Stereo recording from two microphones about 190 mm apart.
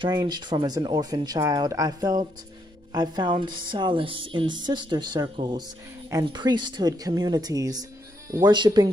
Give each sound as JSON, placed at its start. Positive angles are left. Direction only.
{"t": 0.0, "sound": "speech", "side_deg": -20}